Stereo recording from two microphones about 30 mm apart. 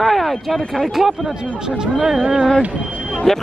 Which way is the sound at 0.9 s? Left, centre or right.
Centre.